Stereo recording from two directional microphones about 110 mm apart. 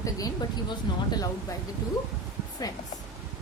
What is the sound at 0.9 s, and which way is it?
Speech, 45° left (ahead or behind).